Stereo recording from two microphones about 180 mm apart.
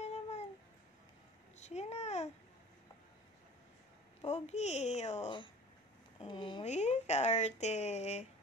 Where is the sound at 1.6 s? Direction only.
35° left (ahead or behind).